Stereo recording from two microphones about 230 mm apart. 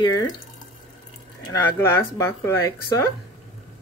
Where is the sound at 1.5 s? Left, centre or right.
Centre.